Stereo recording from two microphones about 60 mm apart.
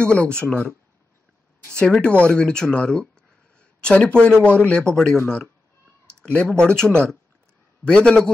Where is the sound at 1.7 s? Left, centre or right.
Centre.